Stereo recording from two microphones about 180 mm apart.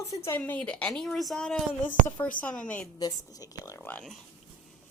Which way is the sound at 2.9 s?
20° left (ahead or behind).